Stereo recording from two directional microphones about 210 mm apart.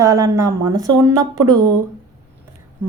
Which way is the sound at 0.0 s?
15° right (ahead or behind).